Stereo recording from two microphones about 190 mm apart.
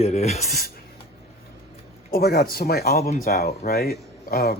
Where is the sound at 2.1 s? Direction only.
55° left (ahead or behind).